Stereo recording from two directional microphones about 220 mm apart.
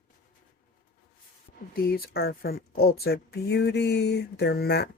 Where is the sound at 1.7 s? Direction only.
45° left (ahead or behind).